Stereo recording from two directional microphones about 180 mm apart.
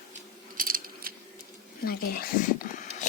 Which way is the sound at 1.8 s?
55° left (ahead or behind).